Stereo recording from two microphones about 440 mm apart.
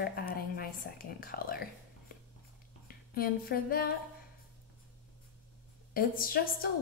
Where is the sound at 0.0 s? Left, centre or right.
Centre.